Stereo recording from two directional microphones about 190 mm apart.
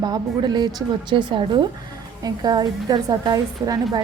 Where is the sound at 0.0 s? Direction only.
20° right (ahead or behind).